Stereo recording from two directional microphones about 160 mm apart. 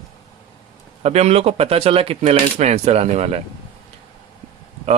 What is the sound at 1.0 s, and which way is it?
Speech, 40° right (ahead or behind).